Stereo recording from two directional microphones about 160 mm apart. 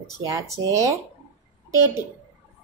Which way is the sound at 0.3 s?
20° right (ahead or behind).